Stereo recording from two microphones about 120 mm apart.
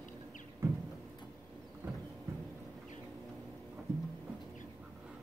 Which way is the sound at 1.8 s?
25° right (ahead or behind).